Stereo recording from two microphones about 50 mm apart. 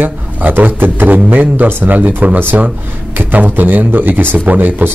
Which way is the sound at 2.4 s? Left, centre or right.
Right.